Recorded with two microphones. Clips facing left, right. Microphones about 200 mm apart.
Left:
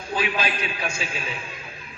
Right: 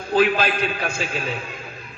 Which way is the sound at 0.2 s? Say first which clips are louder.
Right 8 dB; 55° right (ahead or behind).